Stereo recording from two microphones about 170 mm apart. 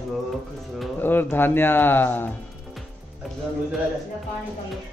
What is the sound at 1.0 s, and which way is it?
Speech, 10° left (ahead or behind).